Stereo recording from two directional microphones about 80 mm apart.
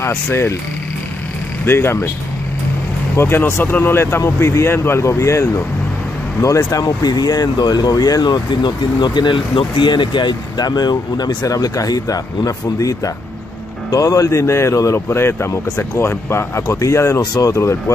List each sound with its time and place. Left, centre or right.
0.0 s speech: left
1.7 s speech: left
3.2 s speech: left
11.4 s speech: left